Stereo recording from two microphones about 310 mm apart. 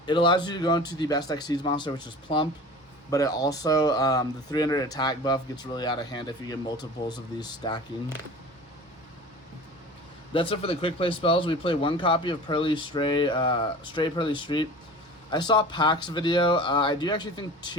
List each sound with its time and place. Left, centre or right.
0.0 s speech: centre
10.3 s speech: centre